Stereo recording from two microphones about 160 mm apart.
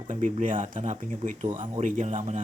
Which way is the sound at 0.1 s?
50° right (ahead or behind).